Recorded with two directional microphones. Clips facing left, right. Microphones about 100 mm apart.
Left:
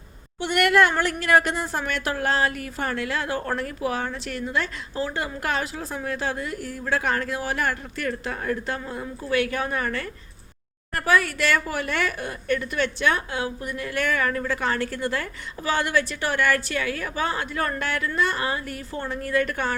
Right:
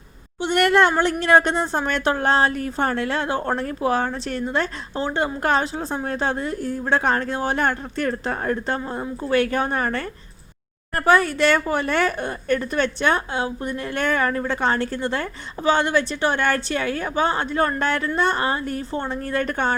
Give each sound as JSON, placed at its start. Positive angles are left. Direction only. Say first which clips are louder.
{"t": 0.5, "sound": "speech", "louder": "right 2 dB", "side_deg": -30}